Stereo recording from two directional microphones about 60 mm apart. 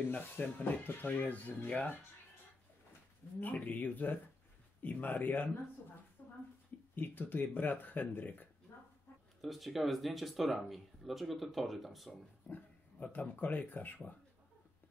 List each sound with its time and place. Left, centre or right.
0.1 s speech: left
3.3 s speech: left
6.2 s a sound: left
7.0 s speech: left
9.4 s speech: centre
12.4 s dog: left
13.2 s speech: left